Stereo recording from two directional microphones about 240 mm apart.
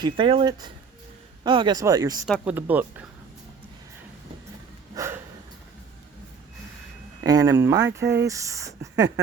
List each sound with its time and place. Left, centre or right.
0.0 s speech: right
2.2 s speech: centre
4.9 s a sound: centre
7.3 s speech: centre
8.0 s speech: right
8.3 s speech: centre
8.8 s speech: right